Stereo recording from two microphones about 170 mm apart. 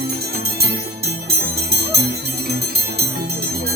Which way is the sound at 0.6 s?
65° right (ahead or behind).